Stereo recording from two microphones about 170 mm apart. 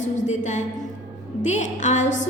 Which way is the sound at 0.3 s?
45° left (ahead or behind).